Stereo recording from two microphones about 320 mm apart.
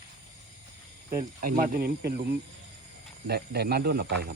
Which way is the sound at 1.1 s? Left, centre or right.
Right.